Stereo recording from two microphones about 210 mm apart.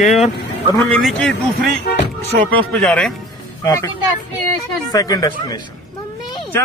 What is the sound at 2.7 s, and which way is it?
Speech, 5° left (ahead or behind).